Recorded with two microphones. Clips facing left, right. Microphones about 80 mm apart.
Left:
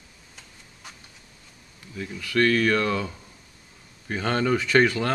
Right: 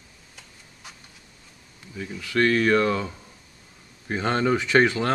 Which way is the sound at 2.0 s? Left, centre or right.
Centre.